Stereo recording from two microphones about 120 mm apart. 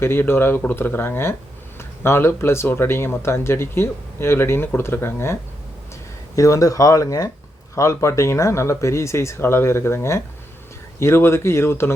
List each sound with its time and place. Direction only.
0.0 s speech: 20° left (ahead or behind)